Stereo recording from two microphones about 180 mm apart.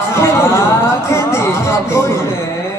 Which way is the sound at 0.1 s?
15° left (ahead or behind).